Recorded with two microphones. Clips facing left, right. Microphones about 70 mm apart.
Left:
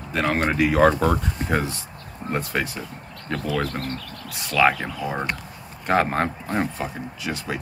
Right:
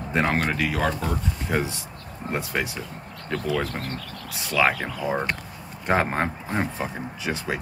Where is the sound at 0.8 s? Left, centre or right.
Left.